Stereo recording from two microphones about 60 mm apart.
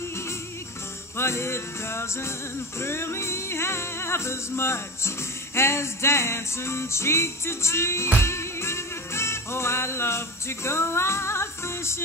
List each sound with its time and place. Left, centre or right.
1.1 s music: left